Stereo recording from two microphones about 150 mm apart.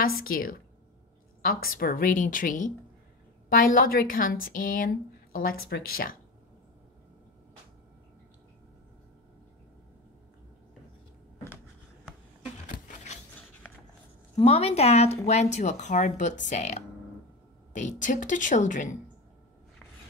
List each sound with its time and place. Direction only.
0.0 s a woman's voice: 75° left (ahead or behind)
12.6 s a sound: 60° left (ahead or behind)
14.3 s a woman's voice: 45° left (ahead or behind)